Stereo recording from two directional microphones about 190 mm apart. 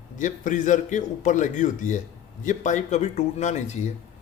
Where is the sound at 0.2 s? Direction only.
40° left (ahead or behind).